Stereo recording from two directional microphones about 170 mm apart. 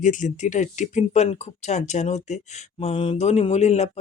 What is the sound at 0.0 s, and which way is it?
Speech, 45° left (ahead or behind).